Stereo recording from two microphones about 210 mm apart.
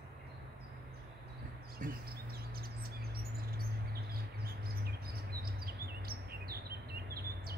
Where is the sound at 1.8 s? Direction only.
45° right (ahead or behind).